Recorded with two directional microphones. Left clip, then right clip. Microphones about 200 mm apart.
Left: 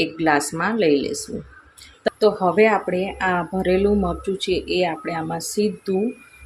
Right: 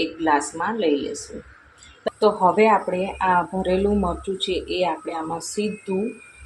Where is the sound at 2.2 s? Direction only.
15° left (ahead or behind).